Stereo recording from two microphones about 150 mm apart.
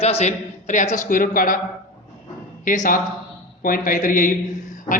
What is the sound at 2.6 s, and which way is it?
A man's voice, 60° left (ahead or behind).